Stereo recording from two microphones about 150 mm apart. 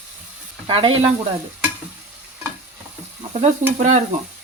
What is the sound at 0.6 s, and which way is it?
Sizzle, 35° right (ahead or behind).